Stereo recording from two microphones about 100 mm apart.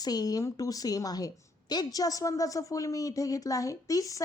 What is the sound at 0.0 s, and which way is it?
A woman's voice, 40° left (ahead or behind).